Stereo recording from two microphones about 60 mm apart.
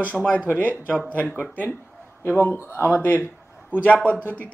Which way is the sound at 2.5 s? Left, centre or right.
Left.